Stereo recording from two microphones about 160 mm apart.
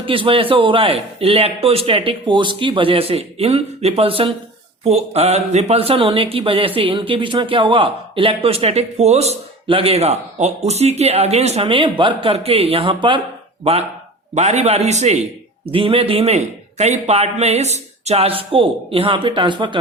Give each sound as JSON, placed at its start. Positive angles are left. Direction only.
{"t": 0.0, "sound": "speech", "side_deg": -35}
{"t": 14.3, "sound": "speech", "side_deg": -45}
{"t": 15.7, "sound": "speech", "side_deg": -35}